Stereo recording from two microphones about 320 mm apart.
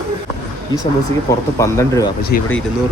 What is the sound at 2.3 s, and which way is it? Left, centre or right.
Speech, left.